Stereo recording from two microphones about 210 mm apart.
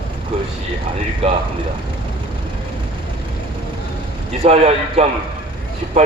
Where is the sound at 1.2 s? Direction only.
30° right (ahead or behind).